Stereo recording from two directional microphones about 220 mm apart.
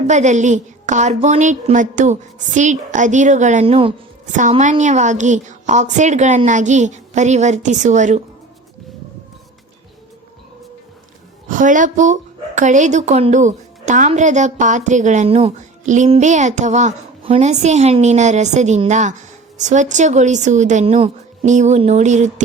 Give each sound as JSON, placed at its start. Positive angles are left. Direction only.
{"t": 0.1, "sound": "speech", "side_deg": -30}
{"t": 11.4, "sound": "speech", "side_deg": -35}